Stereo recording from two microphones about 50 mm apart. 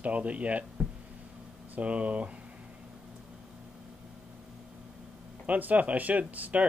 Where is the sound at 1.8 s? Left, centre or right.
Right.